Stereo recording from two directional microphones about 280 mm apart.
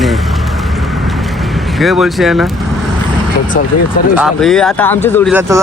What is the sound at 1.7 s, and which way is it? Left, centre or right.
Speech, centre.